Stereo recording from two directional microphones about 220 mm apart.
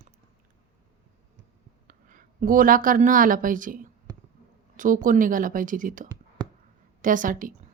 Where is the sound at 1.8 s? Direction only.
40° right (ahead or behind).